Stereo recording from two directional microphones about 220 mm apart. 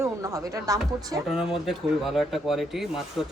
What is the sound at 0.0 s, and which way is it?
Music, 15° right (ahead or behind).